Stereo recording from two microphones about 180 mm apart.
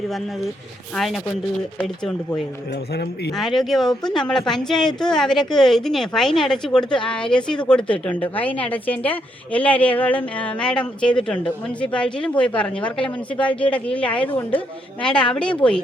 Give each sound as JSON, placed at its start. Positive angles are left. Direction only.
{"t": 0.9, "sound": "speech", "side_deg": 0}
{"t": 2.9, "sound": "speech", "side_deg": 65}
{"t": 3.3, "sound": "a woman's voice", "side_deg": 0}